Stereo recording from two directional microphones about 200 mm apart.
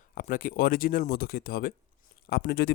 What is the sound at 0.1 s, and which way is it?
Speech, 45° left (ahead or behind).